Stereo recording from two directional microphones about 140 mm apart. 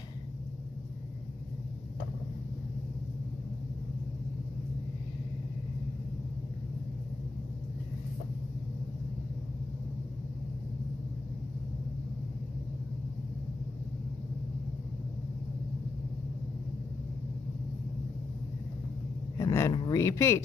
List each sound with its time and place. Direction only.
19.3 s vehicle: 20° left (ahead or behind)
19.7 s speech: 30° left (ahead or behind)